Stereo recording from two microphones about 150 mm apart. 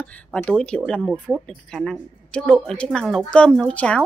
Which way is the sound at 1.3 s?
10° right (ahead or behind).